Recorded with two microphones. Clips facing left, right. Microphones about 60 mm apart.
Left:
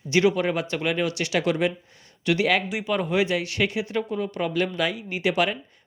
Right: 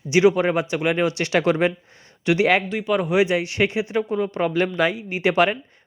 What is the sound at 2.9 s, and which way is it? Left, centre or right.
Speech, centre.